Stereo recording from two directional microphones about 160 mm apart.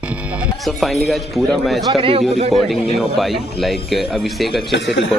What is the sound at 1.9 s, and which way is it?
Speech, 35° right (ahead or behind).